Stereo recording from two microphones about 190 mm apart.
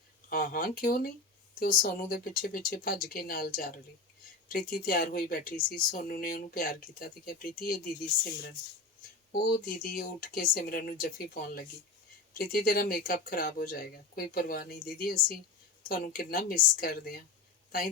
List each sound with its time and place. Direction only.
0.3 s speech: 50° left (ahead or behind)
9.3 s speech: 50° left (ahead or behind)